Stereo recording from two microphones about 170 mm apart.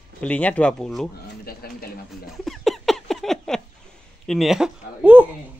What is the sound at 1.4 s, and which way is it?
Speech, 65° left (ahead or behind).